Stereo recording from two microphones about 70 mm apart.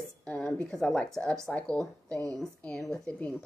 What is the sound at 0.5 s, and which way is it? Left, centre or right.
A woman's voice, centre.